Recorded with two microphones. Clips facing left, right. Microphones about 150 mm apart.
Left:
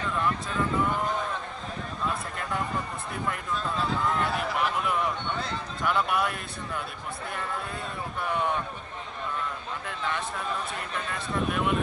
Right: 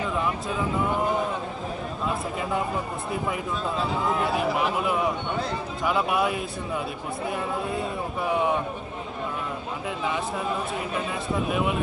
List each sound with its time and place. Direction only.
0.0 s a sound: 10° right (ahead or behind)
2.0 s speech: 5° right (ahead or behind)
10.0 s speech: 5° right (ahead or behind)